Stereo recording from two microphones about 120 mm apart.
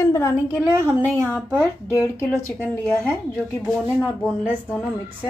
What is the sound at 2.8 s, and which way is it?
Speech, 10° left (ahead or behind).